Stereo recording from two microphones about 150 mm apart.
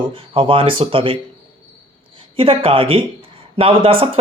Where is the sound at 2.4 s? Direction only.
40° right (ahead or behind).